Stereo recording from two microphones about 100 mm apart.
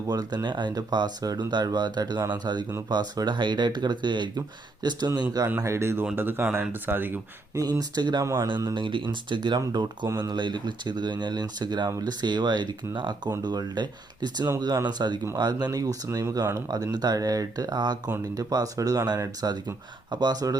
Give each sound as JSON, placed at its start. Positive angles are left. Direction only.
{"t": 0.1, "sound": "speech", "side_deg": -40}
{"t": 5.6, "sound": "speech", "side_deg": -25}
{"t": 7.5, "sound": "speech", "side_deg": -40}